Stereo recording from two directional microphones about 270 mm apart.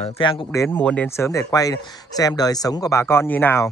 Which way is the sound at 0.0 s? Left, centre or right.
Centre.